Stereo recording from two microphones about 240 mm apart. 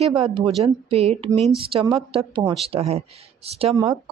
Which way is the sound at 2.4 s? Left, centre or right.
Right.